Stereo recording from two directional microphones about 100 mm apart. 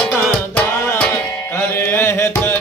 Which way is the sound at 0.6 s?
15° left (ahead or behind).